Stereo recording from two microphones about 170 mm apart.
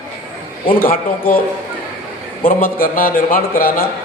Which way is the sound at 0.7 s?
55° left (ahead or behind).